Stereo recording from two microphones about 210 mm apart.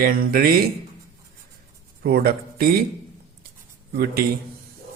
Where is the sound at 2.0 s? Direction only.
45° right (ahead or behind).